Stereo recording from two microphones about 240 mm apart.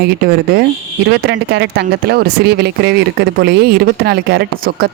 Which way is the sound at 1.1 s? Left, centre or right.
Right.